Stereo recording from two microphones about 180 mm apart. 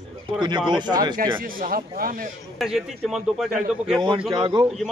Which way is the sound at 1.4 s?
50° right (ahead or behind).